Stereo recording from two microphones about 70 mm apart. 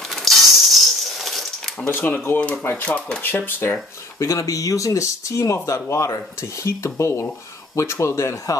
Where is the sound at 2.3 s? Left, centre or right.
Centre.